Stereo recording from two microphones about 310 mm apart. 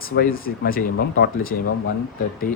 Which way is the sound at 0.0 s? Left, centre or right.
Left.